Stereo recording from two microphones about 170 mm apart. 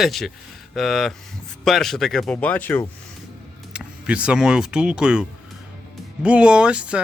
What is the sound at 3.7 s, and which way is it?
Speech, 5° right (ahead or behind).